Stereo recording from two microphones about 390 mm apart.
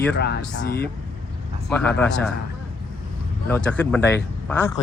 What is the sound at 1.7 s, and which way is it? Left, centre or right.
Speech, centre.